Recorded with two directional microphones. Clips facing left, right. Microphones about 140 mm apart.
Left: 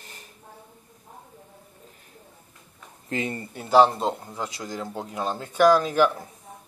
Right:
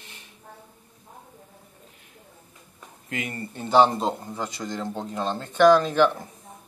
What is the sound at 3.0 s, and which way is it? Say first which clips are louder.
Speech: left 3 dB; 30° left (ahead or behind).